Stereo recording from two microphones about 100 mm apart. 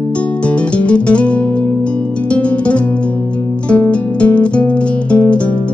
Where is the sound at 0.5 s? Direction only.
10° left (ahead or behind).